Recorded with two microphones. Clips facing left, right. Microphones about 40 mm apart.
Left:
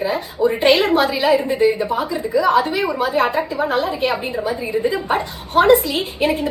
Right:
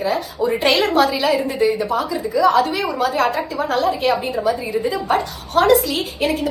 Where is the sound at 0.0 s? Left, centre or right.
Centre.